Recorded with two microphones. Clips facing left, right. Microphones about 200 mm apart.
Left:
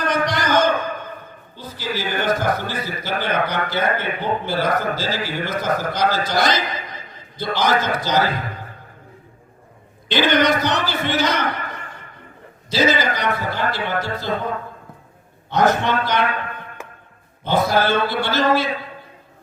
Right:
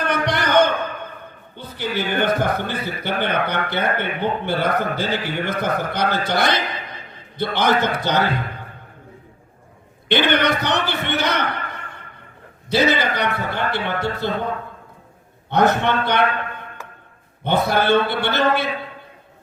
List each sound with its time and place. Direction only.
0.0 s a sound: 60° right (ahead or behind)
1.5 s a man's voice: 60° right (ahead or behind)
10.1 s a man's voice: 60° right (ahead or behind)
15.4 s a man's voice: 60° right (ahead or behind)
17.4 s a man's voice: 60° right (ahead or behind)